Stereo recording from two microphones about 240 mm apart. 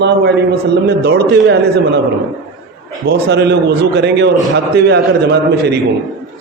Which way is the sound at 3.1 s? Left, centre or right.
Right.